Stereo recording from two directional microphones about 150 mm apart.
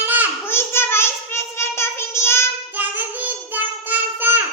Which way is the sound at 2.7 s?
10° right (ahead or behind).